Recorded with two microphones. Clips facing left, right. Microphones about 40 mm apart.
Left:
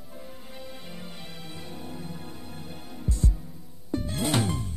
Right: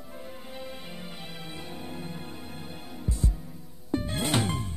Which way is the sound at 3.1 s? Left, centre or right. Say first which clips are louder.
Left 1 dB; centre.